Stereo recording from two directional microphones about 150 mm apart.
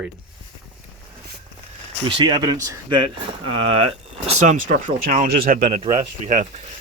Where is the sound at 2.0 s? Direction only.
30° right (ahead or behind).